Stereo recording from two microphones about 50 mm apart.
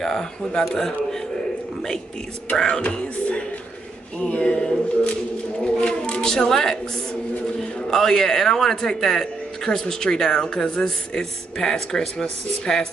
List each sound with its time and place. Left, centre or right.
0.0 s speech: centre
2.6 s a sound: left
4.2 s speech: left
7.9 s speech: centre